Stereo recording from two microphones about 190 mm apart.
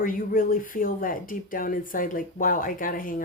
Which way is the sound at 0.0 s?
45° left (ahead or behind).